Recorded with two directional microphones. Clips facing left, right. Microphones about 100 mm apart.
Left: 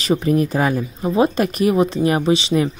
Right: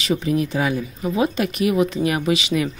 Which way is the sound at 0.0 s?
40° left (ahead or behind).